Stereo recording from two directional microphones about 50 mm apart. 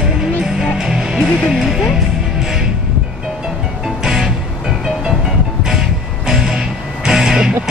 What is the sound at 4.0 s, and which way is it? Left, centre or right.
Music, centre.